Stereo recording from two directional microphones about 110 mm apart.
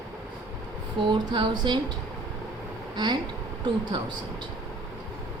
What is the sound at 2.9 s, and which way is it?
Speech, 40° right (ahead or behind).